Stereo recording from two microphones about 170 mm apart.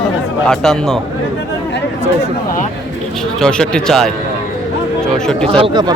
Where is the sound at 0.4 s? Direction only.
Centre (ahead or behind).